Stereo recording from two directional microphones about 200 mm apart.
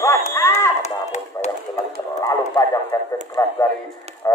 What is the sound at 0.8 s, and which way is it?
Chop, 35° left (ahead or behind).